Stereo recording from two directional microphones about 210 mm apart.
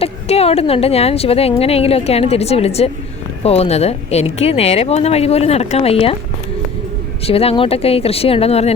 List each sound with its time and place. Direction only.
0.0 s speech: 30° left (ahead or behind)
7.3 s speech: 30° left (ahead or behind)